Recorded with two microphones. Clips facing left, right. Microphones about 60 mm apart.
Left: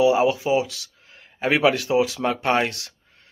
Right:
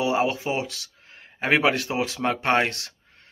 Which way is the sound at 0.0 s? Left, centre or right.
Right.